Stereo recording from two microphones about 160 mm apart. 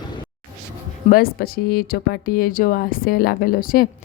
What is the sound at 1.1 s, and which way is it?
Speech, 70° left (ahead or behind).